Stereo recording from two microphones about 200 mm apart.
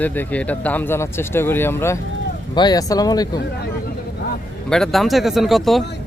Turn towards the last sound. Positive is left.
turn(degrees=0)  # may be behind; listen again after turning